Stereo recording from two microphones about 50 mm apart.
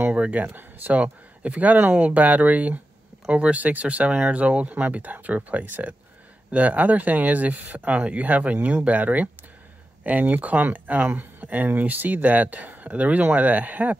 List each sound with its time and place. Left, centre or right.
0.1 s speech: right